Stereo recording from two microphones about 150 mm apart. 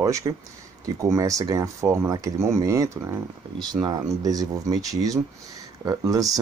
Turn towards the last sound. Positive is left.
turn(degrees=-25)  # may be behind; listen again after turning